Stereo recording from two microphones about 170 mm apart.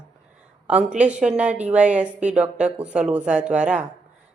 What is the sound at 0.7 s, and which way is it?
Speech, 5° right (ahead or behind).